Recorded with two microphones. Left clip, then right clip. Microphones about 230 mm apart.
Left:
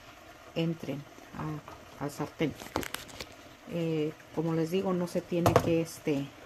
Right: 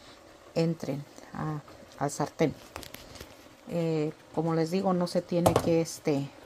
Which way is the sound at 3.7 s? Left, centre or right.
Centre.